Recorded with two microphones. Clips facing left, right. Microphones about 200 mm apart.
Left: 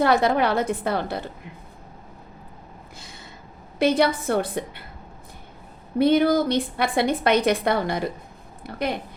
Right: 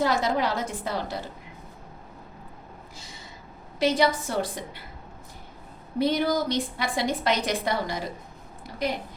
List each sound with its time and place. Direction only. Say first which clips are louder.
0.0 s a woman's voice: left 5 dB; 60° left (ahead or behind)
3.8 s a woman's voice: left 3 dB; 55° left (ahead or behind)
6.0 s a woman's voice: left 6 dB; 55° left (ahead or behind)